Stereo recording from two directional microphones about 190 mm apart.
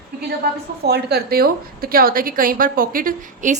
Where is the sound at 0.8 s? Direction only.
55° right (ahead or behind).